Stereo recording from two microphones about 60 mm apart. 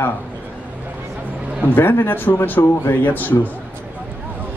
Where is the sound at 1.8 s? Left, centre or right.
Left.